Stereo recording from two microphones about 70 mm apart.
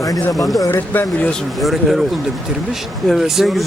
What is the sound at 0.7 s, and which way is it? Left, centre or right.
Speech, left.